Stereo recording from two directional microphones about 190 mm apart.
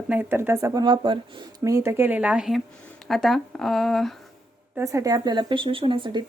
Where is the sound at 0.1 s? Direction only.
10° right (ahead or behind).